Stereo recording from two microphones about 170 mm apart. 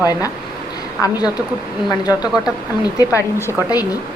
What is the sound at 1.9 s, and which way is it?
Speech, 25° left (ahead or behind).